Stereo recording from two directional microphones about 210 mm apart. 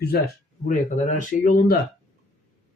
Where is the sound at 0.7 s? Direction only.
35° left (ahead or behind).